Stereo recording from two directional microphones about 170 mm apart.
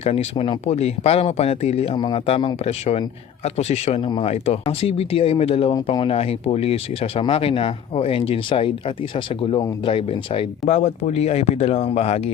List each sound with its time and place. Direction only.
0.0 s speech: 35° left (ahead or behind)